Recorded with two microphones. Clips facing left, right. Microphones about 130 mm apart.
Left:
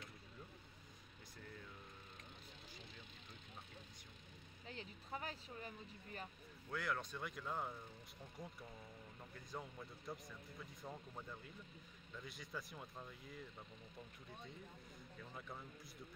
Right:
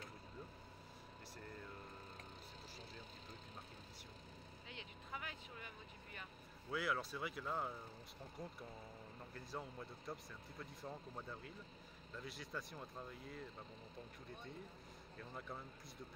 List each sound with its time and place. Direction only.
4.6 s vehicle: 35° left (ahead or behind)
6.7 s speech: 5° right (ahead or behind)
15.3 s speech: centre (ahead or behind)